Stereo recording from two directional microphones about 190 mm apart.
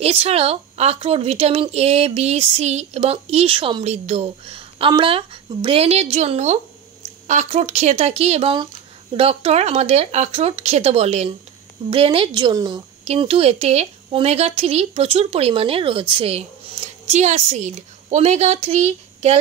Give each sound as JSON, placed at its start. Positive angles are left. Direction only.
{"t": 0.0, "sound": "speech", "side_deg": -30}